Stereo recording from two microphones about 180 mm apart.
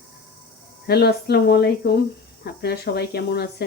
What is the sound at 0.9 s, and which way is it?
Speech, 60° left (ahead or behind).